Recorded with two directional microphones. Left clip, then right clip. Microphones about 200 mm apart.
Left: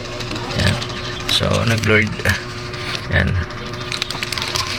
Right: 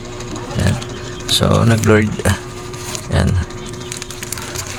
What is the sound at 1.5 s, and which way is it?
Speech, 40° right (ahead or behind).